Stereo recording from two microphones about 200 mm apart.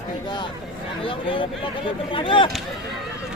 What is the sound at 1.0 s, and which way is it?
Speech, 25° left (ahead or behind).